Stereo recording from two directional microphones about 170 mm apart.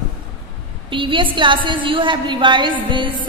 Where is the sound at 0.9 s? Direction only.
30° right (ahead or behind).